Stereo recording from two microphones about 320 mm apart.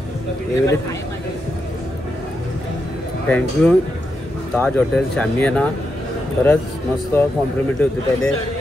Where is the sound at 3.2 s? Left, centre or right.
Centre.